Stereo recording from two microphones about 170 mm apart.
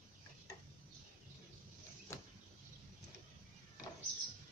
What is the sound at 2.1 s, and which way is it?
Vehicle, 15° left (ahead or behind).